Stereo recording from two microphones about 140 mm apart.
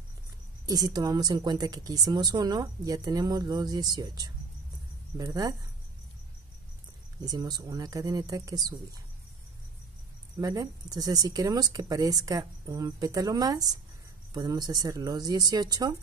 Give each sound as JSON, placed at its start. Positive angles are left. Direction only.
{"t": 0.7, "sound": "a woman's voice", "side_deg": -30}
{"t": 7.2, "sound": "a woman's voice", "side_deg": -25}
{"t": 10.4, "sound": "a woman's voice", "side_deg": -25}